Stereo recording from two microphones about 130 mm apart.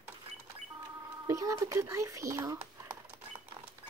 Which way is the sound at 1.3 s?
25° right (ahead or behind).